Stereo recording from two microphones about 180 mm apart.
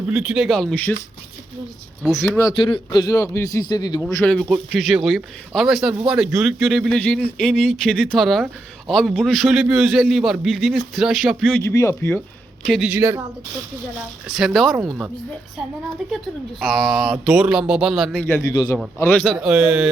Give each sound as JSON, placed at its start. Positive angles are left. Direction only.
{"t": 0.1, "sound": "a man's voice", "side_deg": -5}
{"t": 2.0, "sound": "a man's voice", "side_deg": 5}
{"t": 2.4, "sound": "a man's voice", "side_deg": 25}
{"t": 4.0, "sound": "a man's voice", "side_deg": 5}
{"t": 11.6, "sound": "speech", "side_deg": 15}
{"t": 12.6, "sound": "a man's voice", "side_deg": 0}
{"t": 12.9, "sound": "speech", "side_deg": -15}
{"t": 14.3, "sound": "a man's voice", "side_deg": 0}
{"t": 16.1, "sound": "a man's voice", "side_deg": 0}
{"t": 18.5, "sound": "a man's voice", "side_deg": 20}
{"t": 18.9, "sound": "a man's voice", "side_deg": 10}